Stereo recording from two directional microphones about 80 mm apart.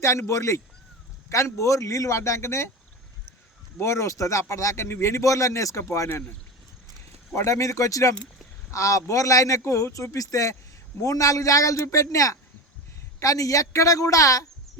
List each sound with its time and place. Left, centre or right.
0.0 s speech: left
3.8 s speech: left
7.3 s speech: left